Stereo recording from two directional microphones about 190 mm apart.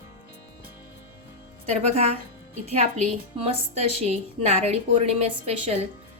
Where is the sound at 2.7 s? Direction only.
35° right (ahead or behind).